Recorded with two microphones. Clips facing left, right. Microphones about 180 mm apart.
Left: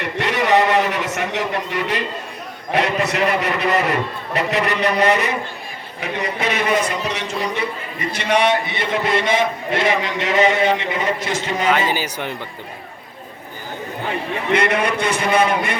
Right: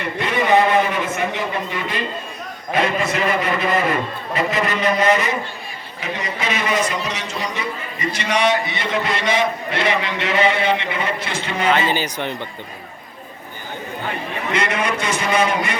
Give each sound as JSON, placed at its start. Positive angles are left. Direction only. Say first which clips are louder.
{"t": 0.2, "sound": "a sound", "louder": "even", "side_deg": 75}
{"t": 2.7, "sound": "a man's voice", "louder": "left 1 dB", "side_deg": 70}
{"t": 11.9, "sound": "speech", "louder": "right 1 dB", "side_deg": 10}
{"t": 14.5, "sound": "a man's voice", "louder": "left 4 dB", "side_deg": 55}